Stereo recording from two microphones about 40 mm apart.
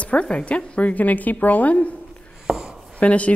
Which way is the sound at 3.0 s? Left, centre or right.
Left.